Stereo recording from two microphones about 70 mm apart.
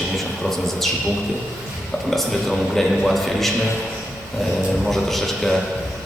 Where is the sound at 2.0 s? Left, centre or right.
Centre.